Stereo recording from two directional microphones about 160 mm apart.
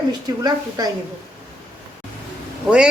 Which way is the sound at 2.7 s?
5° right (ahead or behind).